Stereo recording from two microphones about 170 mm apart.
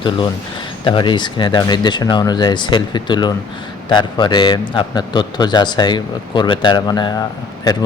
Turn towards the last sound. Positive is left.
turn(degrees=25)  # may be behind; listen again after turning